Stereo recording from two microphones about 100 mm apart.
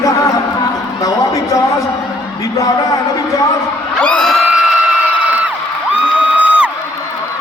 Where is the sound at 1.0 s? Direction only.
35° left (ahead or behind).